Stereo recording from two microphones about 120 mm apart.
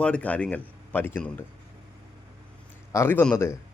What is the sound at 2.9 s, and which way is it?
Speech, 20° left (ahead or behind).